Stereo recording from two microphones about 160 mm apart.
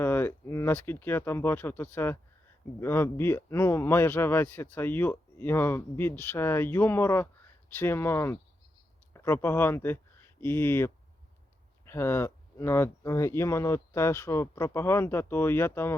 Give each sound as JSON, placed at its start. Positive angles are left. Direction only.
{"t": 0.0, "sound": "speech", "side_deg": 15}